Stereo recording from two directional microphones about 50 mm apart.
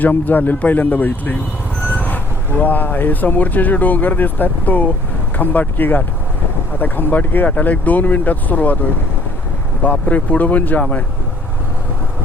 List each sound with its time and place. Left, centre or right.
0.0 s speech: left
9.8 s speech: left